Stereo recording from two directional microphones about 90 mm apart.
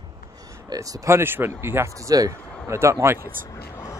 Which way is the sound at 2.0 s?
40° right (ahead or behind).